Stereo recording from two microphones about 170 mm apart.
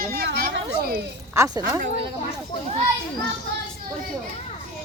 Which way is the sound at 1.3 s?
20° right (ahead or behind).